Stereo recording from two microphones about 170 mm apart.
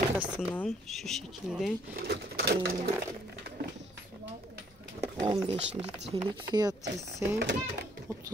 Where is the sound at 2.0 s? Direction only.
65° right (ahead or behind).